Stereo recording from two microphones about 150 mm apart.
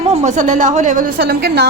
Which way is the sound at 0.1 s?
50° right (ahead or behind).